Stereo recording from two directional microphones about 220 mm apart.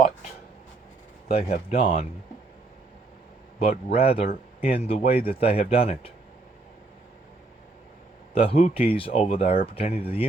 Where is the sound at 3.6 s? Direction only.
25° left (ahead or behind).